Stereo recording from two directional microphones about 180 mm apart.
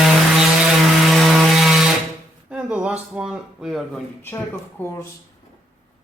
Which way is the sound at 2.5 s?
5° right (ahead or behind).